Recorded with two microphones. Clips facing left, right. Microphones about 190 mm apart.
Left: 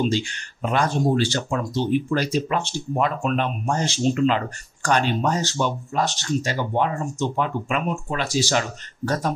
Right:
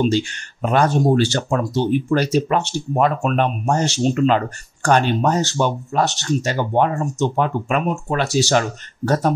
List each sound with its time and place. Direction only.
0.6 s speech: 50° right (ahead or behind)
4.9 s speech: 60° right (ahead or behind)
8.2 s speech: 65° right (ahead or behind)